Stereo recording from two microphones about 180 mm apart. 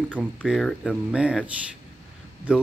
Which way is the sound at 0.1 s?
5° left (ahead or behind).